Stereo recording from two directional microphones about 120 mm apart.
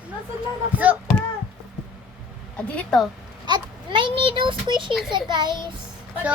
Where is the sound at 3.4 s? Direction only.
40° right (ahead or behind).